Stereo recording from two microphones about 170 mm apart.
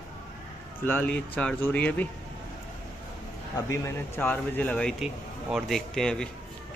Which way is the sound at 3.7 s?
15° left (ahead or behind).